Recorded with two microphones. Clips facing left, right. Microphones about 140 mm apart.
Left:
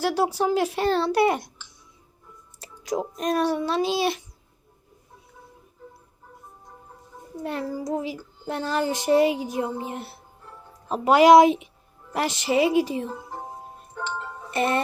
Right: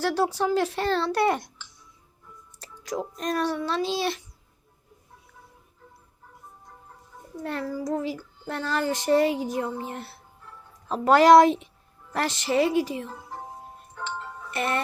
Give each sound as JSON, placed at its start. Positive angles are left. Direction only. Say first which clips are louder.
{"t": 0.0, "sound": "child singing", "louder": "left 1 dB", "side_deg": 10}
{"t": 2.6, "sound": "child singing", "louder": "left 4 dB", "side_deg": 15}
{"t": 7.4, "sound": "child singing", "louder": "left 1 dB", "side_deg": 15}
{"t": 14.5, "sound": "speech", "louder": "left 4 dB", "side_deg": 20}